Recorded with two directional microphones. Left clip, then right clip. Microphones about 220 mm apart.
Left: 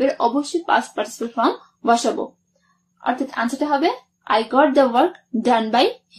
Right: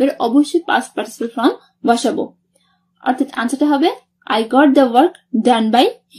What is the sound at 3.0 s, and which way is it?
A woman's voice, 50° right (ahead or behind).